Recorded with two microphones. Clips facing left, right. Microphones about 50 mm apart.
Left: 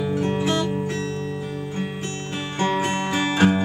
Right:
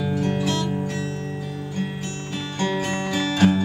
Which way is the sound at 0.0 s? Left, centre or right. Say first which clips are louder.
Left 1 dB; centre.